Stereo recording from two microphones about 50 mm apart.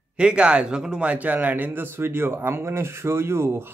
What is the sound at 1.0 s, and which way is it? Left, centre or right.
Speech, right.